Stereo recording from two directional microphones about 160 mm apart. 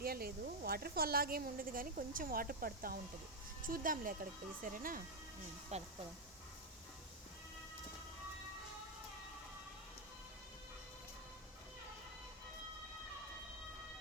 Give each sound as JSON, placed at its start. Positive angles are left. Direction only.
{"t": 0.0, "sound": "speech", "side_deg": -70}
{"t": 5.7, "sound": "speech", "side_deg": -45}